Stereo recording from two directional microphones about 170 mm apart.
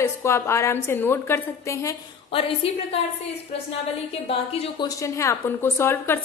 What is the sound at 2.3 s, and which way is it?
Speech, 35° left (ahead or behind).